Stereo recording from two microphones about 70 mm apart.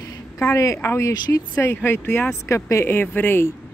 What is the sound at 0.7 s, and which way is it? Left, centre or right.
Speech, left.